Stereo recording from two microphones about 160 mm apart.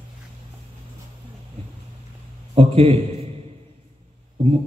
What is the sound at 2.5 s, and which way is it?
Speech, 35° right (ahead or behind).